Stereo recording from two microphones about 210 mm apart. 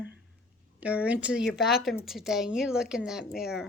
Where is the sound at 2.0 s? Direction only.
Centre (ahead or behind).